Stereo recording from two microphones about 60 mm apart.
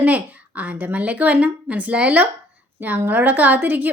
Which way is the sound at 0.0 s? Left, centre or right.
Right.